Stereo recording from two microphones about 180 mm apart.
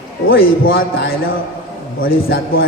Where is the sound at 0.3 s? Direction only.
55° left (ahead or behind).